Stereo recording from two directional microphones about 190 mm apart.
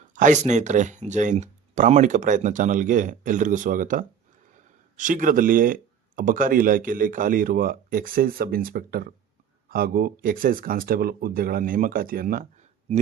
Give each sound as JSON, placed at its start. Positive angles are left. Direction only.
{"t": 0.1, "sound": "speech", "side_deg": -40}